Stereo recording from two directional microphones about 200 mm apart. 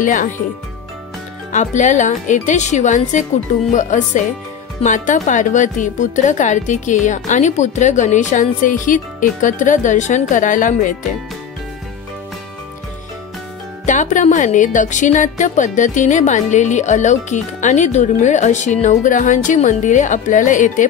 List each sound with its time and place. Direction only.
0.0 s speech: 40° left (ahead or behind)
1.5 s speech: 35° left (ahead or behind)
13.8 s speech: 40° left (ahead or behind)